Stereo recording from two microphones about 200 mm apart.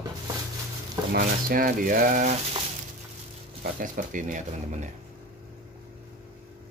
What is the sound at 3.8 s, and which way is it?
Mantra, 40° right (ahead or behind).